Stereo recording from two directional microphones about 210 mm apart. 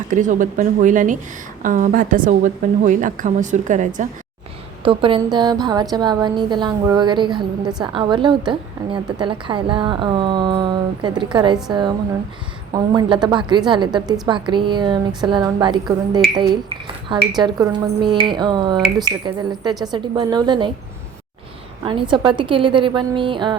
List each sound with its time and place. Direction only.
0.1 s a woman's voice: 35° right (ahead or behind)
4.8 s a woman's voice: 25° right (ahead or behind)
21.8 s a woman's voice: 25° right (ahead or behind)